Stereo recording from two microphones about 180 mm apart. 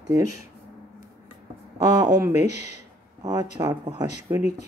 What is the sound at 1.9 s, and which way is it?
Speech, 20° right (ahead or behind).